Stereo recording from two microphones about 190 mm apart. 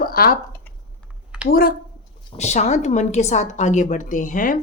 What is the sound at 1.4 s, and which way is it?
Speech, 50° left (ahead or behind).